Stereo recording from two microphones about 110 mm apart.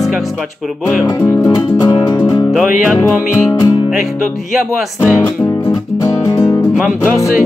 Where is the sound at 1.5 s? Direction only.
40° left (ahead or behind).